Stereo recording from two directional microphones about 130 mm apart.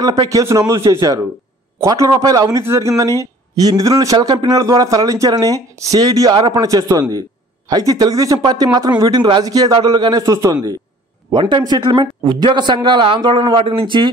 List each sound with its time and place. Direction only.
0.0 s speech: 30° right (ahead or behind)
11.2 s speech: 40° right (ahead or behind)